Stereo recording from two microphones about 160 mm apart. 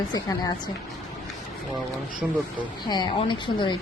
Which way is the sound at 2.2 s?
10° right (ahead or behind).